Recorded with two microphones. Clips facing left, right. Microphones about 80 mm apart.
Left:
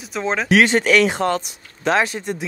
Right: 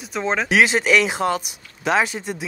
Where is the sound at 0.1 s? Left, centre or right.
Centre.